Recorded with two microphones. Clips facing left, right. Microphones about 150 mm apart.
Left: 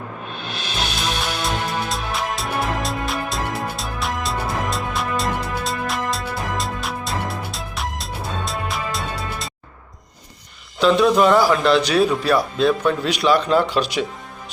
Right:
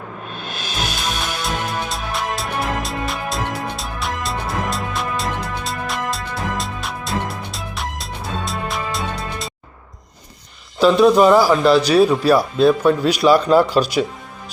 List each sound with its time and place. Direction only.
1.2 s music: centre (ahead or behind)
10.8 s a man's voice: 5° right (ahead or behind)
13.7 s speech: 40° right (ahead or behind)